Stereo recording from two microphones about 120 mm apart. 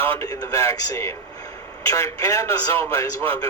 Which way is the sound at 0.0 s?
20° left (ahead or behind).